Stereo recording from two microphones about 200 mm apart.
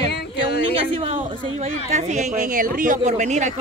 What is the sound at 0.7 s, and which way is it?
Speech, 30° right (ahead or behind).